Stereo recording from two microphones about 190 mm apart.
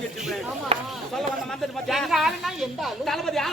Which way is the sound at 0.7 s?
30° right (ahead or behind).